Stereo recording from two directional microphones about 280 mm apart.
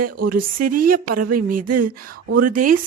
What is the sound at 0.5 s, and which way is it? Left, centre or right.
Speech, right.